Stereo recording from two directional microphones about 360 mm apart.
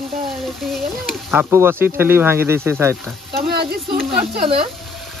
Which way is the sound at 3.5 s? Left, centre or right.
Right.